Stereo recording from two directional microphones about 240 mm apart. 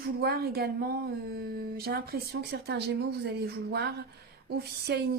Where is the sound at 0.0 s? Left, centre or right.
Right.